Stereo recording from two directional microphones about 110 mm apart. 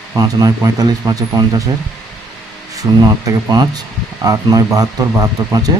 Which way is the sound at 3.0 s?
35° right (ahead or behind).